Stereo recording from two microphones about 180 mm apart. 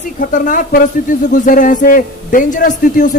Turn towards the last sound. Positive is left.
turn(degrees=50)  # may be behind; listen again after turning